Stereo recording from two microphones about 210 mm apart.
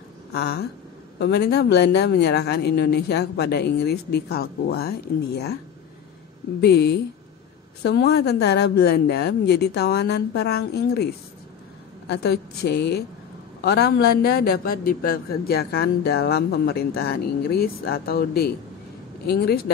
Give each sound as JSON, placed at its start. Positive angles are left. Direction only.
{"t": 0.3, "sound": "a sound", "side_deg": 50}
{"t": 1.2, "sound": "a man's voice", "side_deg": 50}
{"t": 6.6, "sound": "a man's voice", "side_deg": 50}